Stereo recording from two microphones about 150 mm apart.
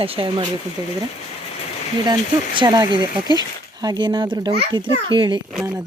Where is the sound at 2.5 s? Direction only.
30° right (ahead or behind).